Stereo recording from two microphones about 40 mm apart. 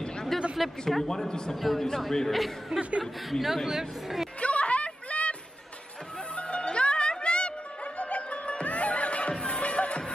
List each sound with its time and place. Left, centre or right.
0.3 s a sound: centre
0.8 s speech: centre
4.4 s music: left
6.3 s music: left